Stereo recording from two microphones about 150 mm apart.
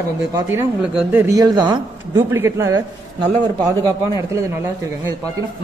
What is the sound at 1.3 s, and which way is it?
A woman's voice, 25° right (ahead or behind).